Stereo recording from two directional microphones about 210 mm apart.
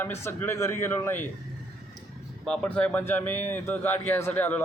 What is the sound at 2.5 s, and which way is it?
A man's voice, 5° left (ahead or behind).